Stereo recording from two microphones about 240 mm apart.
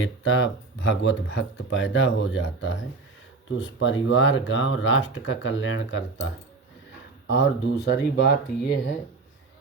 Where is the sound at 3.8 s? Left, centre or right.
Left.